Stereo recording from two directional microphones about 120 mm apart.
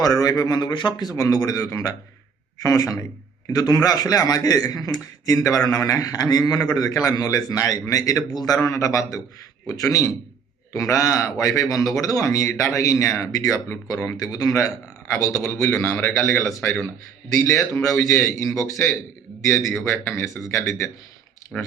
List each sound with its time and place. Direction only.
0.0 s a man's voice: 30° left (ahead or behind)
21.5 s speech: centre (ahead or behind)